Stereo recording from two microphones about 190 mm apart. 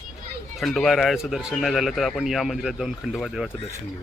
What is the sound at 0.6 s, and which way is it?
Speech, centre (ahead or behind).